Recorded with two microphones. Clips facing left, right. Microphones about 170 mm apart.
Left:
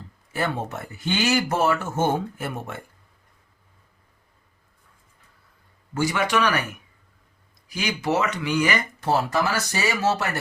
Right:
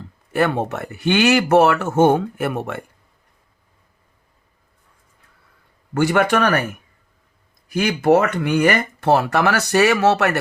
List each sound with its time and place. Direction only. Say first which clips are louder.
0.3 s speech: right 8 dB; 70° right (ahead or behind)
5.9 s speech: right 6 dB; 60° right (ahead or behind)